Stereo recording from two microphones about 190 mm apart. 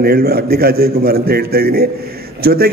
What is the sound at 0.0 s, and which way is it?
A man's voice, 55° right (ahead or behind).